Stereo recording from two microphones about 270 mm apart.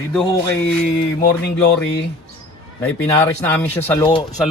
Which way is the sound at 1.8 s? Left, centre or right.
Left.